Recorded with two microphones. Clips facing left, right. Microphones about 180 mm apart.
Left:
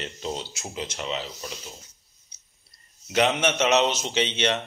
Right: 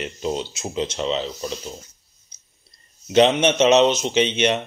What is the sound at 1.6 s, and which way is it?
Filing, 40° right (ahead or behind).